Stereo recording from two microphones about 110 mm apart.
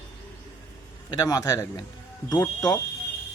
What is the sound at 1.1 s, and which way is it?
Speech, 35° left (ahead or behind).